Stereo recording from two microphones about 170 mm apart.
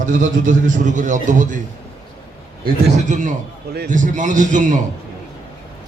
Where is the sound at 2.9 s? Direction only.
45° right (ahead or behind).